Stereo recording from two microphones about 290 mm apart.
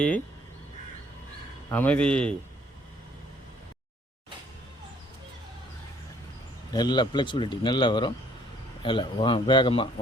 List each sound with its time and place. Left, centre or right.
1.7 s speech: centre
6.7 s speech: centre